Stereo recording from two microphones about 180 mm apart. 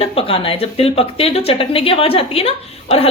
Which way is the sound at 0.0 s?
30° left (ahead or behind).